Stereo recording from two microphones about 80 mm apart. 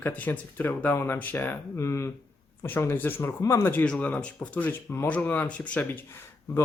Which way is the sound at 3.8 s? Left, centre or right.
Centre.